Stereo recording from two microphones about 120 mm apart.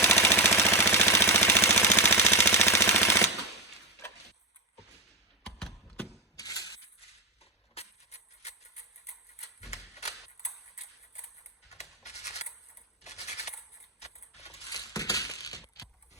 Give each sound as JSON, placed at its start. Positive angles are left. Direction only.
{"t": 0.0, "sound": "a sound", "side_deg": 20}
{"t": 1.8, "sound": "machine gun", "side_deg": 20}
{"t": 5.5, "sound": "a sound", "side_deg": 5}
{"t": 6.1, "sound": "mechanisms", "side_deg": 30}
{"t": 7.8, "sound": "music", "side_deg": 65}
{"t": 14.5, "sound": "crushing", "side_deg": 30}